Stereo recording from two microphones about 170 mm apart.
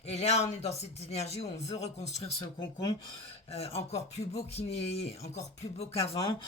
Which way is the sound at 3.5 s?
35° left (ahead or behind).